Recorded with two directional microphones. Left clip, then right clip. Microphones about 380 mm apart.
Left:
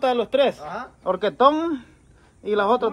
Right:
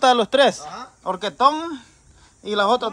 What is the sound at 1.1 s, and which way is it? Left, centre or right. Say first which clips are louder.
Speech: even; centre.